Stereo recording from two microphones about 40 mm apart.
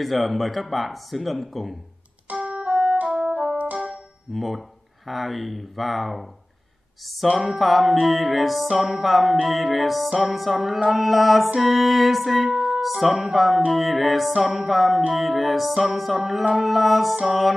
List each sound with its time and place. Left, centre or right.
0.0 s music: centre
2.4 s music: right
3.3 s music: right
3.9 s speech: centre
7.4 s music: centre